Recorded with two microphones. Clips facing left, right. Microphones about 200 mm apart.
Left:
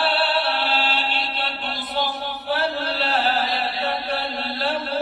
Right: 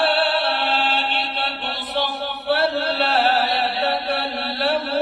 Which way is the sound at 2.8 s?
65° right (ahead or behind).